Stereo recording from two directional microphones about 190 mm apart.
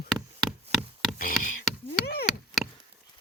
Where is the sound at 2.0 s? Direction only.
55° left (ahead or behind).